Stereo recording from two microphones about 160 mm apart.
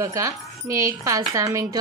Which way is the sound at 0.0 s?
20° right (ahead or behind).